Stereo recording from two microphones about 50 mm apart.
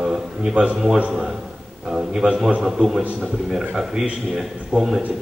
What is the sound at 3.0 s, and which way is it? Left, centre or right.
Speech, right.